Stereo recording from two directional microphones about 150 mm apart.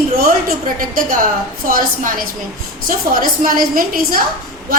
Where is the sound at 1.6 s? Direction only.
70° right (ahead or behind).